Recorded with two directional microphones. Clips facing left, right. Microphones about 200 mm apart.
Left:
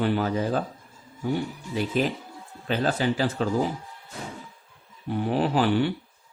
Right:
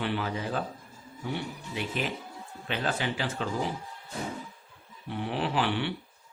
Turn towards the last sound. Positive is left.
turn(degrees=40)  # may be behind; listen again after turning